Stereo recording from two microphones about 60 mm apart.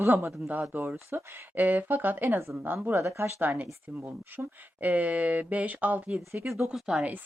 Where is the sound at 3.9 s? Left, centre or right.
Right.